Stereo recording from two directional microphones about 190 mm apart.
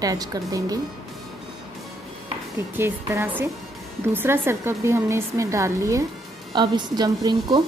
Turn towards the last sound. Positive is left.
turn(degrees=-20)  # may be behind; listen again after turning